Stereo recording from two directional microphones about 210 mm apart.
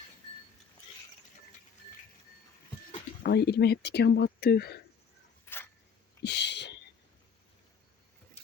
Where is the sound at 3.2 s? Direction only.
50° left (ahead or behind).